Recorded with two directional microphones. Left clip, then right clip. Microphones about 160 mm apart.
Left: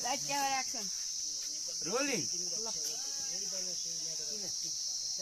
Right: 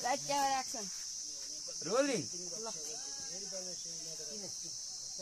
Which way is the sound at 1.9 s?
45° right (ahead or behind).